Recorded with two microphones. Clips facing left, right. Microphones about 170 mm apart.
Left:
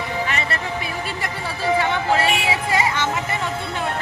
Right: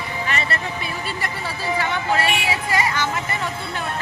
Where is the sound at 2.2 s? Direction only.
25° left (ahead or behind).